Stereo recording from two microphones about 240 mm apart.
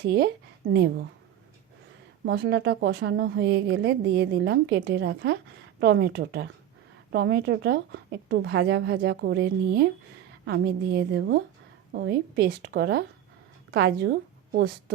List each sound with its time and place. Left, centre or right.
0.0 s a woman's voice: right
2.2 s a woman's voice: right